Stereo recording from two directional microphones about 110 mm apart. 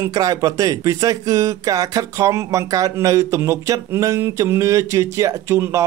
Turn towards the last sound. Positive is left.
turn(degrees=-25)  # may be behind; listen again after turning